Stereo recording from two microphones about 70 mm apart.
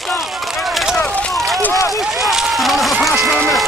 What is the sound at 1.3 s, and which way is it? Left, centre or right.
Run, centre.